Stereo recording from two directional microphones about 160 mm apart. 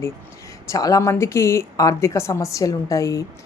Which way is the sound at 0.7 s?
20° left (ahead or behind).